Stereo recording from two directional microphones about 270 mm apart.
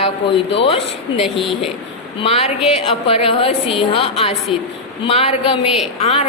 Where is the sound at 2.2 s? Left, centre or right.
Left.